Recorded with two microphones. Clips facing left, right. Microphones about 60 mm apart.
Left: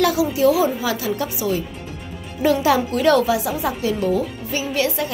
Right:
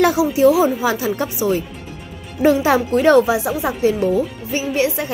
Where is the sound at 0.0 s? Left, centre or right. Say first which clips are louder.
Right 3 dB; right.